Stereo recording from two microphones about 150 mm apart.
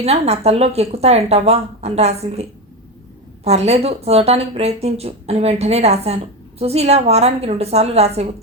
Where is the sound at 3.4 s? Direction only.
45° right (ahead or behind).